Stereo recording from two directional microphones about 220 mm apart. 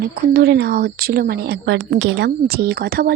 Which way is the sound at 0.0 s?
45° right (ahead or behind).